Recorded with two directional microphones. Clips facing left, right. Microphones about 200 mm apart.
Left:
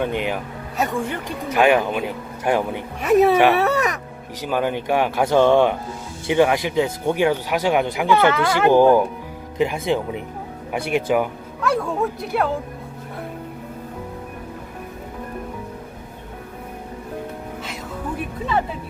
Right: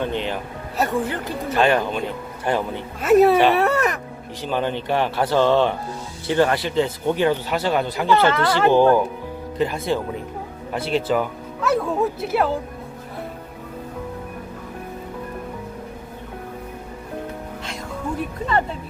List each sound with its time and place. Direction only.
0.0 s speech: 10° left (ahead or behind)
0.8 s speech: centre (ahead or behind)
1.1 s speech: 10° left (ahead or behind)
3.0 s speech: centre (ahead or behind)
11.6 s bow-wow: centre (ahead or behind)